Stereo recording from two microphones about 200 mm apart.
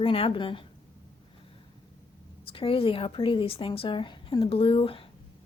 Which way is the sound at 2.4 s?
25° left (ahead or behind).